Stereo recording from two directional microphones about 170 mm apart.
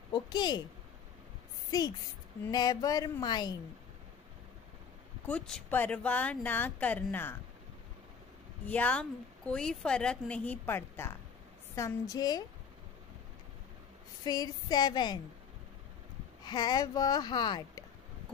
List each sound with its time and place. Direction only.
0.1 s speech: 25° left (ahead or behind)
1.7 s speech: 20° left (ahead or behind)
5.2 s speech: 5° left (ahead or behind)
8.6 s speech: 10° left (ahead or behind)
14.2 s speech: 20° left (ahead or behind)
16.4 s speech: 25° left (ahead or behind)